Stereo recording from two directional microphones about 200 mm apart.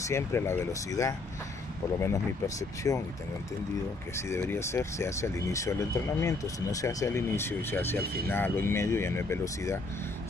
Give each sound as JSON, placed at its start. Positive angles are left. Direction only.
{"t": 0.0, "sound": "speech", "side_deg": 15}
{"t": 4.3, "sound": "speech", "side_deg": 15}